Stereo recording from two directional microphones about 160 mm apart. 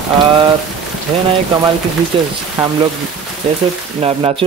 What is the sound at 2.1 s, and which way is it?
Speech, 35° right (ahead or behind).